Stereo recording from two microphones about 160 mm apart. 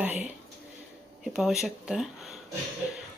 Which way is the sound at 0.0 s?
10° right (ahead or behind).